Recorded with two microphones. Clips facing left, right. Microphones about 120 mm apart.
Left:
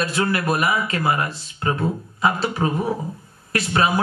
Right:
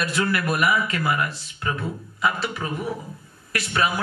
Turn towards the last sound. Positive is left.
turn(degrees=30)  # may be behind; listen again after turning